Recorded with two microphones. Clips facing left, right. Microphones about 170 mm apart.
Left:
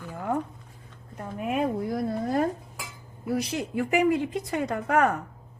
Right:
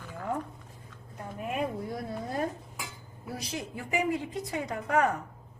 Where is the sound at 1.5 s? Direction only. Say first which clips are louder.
Left 6 dB; 90° left.